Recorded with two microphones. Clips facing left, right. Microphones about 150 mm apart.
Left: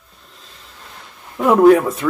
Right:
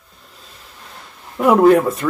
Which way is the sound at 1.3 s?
Centre (ahead or behind).